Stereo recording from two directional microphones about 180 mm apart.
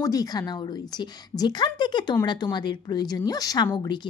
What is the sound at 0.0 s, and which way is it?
Speech, 20° left (ahead or behind).